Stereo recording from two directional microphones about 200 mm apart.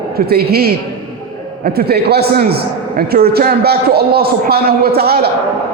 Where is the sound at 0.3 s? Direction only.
50° right (ahead or behind).